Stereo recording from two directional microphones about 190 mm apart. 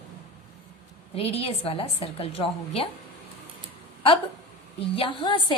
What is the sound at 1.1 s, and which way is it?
A woman's voice, 30° left (ahead or behind).